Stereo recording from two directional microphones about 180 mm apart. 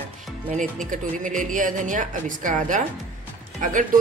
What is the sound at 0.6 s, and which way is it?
Speech, 45° right (ahead or behind).